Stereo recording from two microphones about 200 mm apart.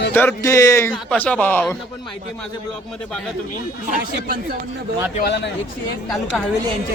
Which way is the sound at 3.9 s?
50° right (ahead or behind).